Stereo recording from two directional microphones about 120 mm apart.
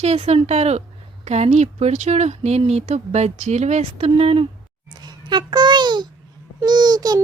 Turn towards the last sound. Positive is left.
turn(degrees=-35)  # may be behind; listen again after turning